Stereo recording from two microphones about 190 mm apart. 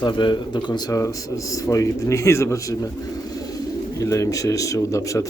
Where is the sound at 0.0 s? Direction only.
25° left (ahead or behind).